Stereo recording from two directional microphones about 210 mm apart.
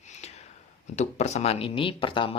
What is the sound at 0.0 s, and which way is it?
Speech, 35° left (ahead or behind).